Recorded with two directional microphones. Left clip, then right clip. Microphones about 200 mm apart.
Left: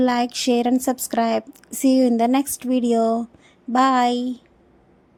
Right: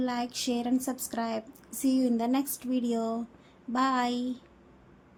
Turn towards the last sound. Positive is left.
turn(degrees=30)  # may be behind; listen again after turning